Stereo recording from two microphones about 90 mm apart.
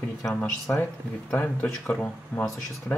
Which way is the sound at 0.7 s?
20° left (ahead or behind).